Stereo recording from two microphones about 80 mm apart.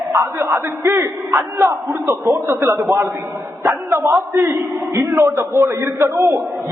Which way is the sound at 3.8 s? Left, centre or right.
Right.